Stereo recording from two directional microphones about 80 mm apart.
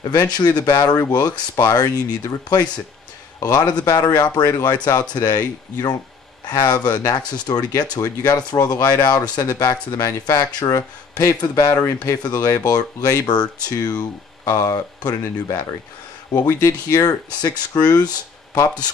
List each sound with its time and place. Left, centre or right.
0.1 s speech: left
9.4 s speech: left
11.8 s speech: left
12.2 s speech: left
16.4 s speech: left
17.0 s speech: left